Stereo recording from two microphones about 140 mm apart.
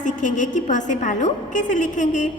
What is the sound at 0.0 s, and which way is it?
A woman's voice, 65° left (ahead or behind).